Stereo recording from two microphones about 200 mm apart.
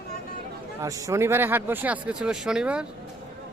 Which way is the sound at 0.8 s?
15° right (ahead or behind).